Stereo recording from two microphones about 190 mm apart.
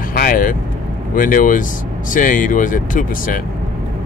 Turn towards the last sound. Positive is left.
turn(degrees=45)  # may be behind; listen again after turning